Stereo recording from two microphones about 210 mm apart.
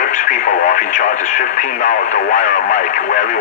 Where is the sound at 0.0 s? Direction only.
40° left (ahead or behind).